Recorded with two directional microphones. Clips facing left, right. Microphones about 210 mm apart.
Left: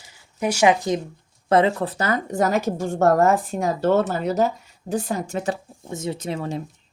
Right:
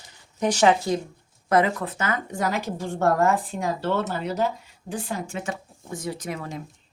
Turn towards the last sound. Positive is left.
turn(degrees=30)  # may be behind; listen again after turning